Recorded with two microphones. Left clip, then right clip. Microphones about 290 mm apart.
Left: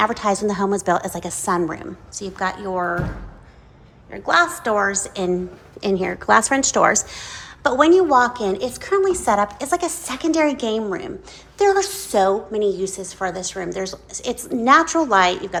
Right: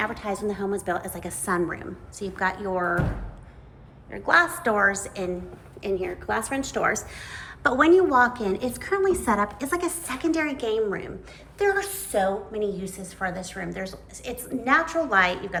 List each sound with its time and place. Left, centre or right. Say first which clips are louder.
0.0 s a woman's voice: left 9 dB; left; by 3.0 s centre
4.1 s a woman's voice: left 3 dB; centre